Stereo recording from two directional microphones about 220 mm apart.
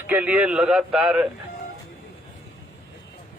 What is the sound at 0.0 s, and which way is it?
Speech, 10° right (ahead or behind).